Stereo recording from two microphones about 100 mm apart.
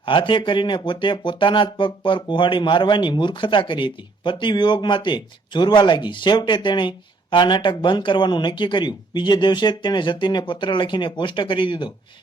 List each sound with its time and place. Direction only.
0.0 s speech: 55° left (ahead or behind)